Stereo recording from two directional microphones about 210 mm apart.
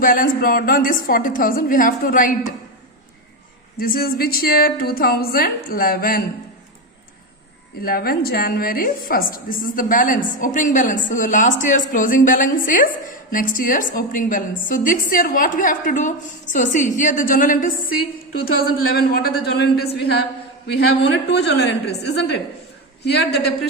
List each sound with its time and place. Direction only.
0.0 s a woman's voice: 40° left (ahead or behind)
3.8 s a woman's voice: 45° left (ahead or behind)
7.8 s a woman's voice: 45° left (ahead or behind)
20.7 s a woman's voice: 55° left (ahead or behind)